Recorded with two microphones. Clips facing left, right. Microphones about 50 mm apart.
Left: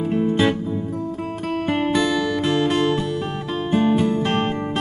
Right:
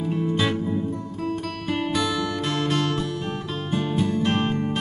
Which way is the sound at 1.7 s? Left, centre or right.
Left.